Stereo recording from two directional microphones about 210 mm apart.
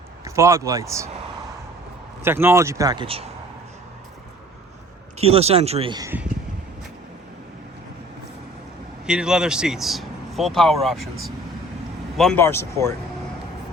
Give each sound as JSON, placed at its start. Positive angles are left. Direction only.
{"t": 0.3, "sound": "speech", "side_deg": -15}
{"t": 2.2, "sound": "speech", "side_deg": -10}
{"t": 5.1, "sound": "speech", "side_deg": -30}
{"t": 9.0, "sound": "speech", "side_deg": -5}